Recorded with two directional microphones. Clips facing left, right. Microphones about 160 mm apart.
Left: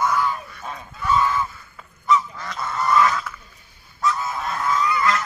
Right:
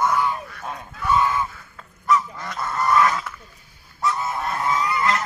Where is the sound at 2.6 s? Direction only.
5° right (ahead or behind).